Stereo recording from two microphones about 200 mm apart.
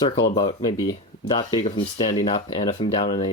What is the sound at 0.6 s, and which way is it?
Speech, 20° left (ahead or behind).